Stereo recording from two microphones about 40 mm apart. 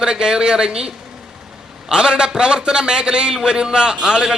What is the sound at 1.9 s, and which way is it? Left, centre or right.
A man's voice, right.